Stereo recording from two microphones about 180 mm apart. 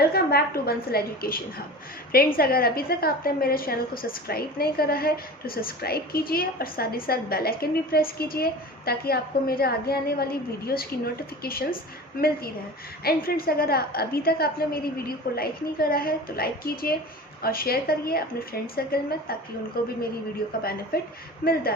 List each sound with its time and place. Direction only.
0.0 s a woman's voice: 60° left (ahead or behind)